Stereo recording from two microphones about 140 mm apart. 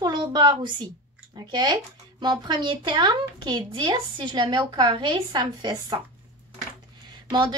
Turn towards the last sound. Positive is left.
turn(degrees=-35)  # may be behind; listen again after turning